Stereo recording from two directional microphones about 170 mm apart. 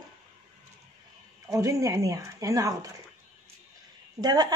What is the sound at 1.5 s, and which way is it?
A woman's voice, 20° right (ahead or behind).